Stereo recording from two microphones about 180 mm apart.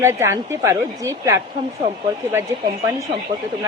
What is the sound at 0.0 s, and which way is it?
A woman's voice, 15° right (ahead or behind).